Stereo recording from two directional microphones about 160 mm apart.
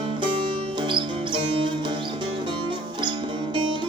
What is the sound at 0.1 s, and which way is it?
Music, 30° right (ahead or behind).